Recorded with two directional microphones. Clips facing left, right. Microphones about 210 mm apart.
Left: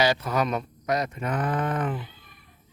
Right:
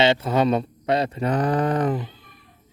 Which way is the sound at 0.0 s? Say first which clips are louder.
Right 5 dB; 25° right (ahead or behind).